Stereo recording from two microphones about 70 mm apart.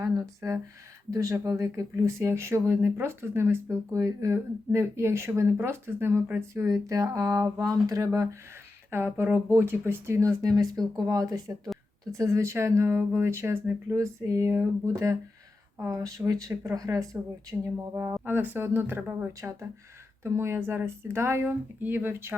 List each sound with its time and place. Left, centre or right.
0.0 s speech: right
6.8 s speech: right
8.9 s speech: right
18.3 s speech: right
21.4 s speech: right